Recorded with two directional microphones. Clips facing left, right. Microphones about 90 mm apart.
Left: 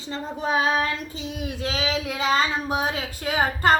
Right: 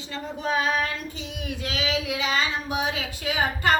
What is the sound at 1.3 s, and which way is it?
A woman's voice, 35° left (ahead or behind).